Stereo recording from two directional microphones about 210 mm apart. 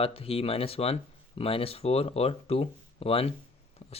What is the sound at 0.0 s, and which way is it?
Speech, 25° left (ahead or behind).